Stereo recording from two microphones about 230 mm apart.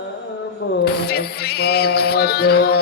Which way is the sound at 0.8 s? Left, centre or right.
Left.